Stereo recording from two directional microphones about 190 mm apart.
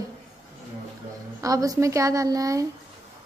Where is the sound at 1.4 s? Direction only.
20° right (ahead or behind).